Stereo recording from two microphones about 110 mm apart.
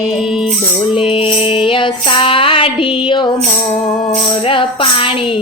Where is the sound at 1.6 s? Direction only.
50° left (ahead or behind).